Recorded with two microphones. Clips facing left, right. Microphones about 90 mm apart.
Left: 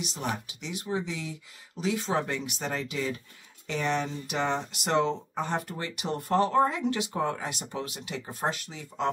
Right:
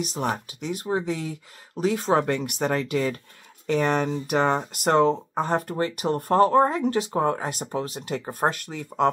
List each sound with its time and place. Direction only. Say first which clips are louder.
0.0 s speech: right 6 dB; 45° right (ahead or behind)